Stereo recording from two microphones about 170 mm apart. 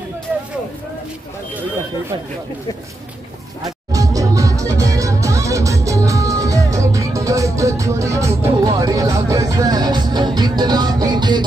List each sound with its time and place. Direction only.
3.6 s music: 20° right (ahead or behind)